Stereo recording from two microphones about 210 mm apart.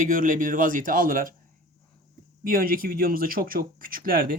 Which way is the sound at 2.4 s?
45° right (ahead or behind).